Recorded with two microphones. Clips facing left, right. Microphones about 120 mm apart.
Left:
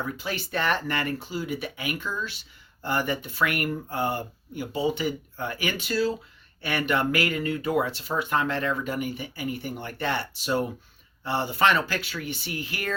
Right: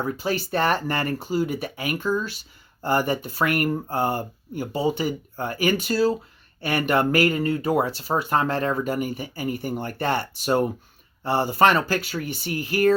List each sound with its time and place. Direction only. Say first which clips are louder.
0.0 s speech: right 6 dB; 40° right (ahead or behind)